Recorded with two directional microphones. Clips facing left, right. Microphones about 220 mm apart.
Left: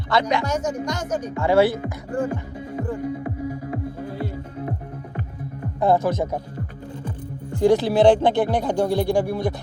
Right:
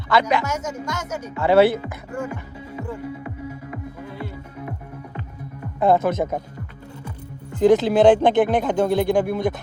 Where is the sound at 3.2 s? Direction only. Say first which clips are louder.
Left 5 dB; 35° left (ahead or behind).